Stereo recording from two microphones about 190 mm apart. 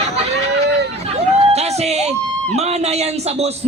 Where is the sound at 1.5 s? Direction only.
35° right (ahead or behind).